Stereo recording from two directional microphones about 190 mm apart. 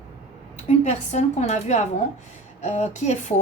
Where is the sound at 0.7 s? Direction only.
35° left (ahead or behind).